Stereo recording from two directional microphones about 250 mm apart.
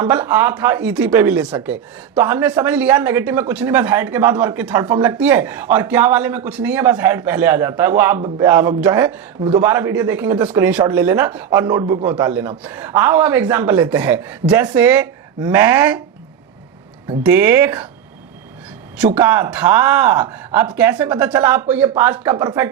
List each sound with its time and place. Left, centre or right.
0.0 s a man's voice: centre
9.4 s a man's voice: right
9.6 s a man's voice: centre
17.2 s a man's voice: centre
18.9 s a man's voice: centre